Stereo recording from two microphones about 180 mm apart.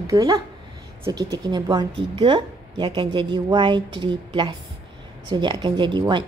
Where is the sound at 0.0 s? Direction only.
20° right (ahead or behind).